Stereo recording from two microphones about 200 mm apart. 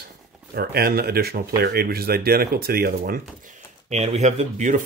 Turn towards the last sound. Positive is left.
turn(degrees=-35)  # may be behind; listen again after turning